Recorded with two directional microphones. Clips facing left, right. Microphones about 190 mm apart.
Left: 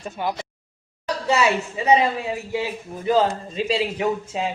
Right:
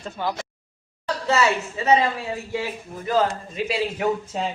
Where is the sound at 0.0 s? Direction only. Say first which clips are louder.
Left 1 dB; 15° left (ahead or behind).